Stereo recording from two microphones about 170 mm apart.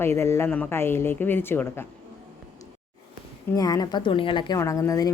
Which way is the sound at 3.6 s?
20° left (ahead or behind).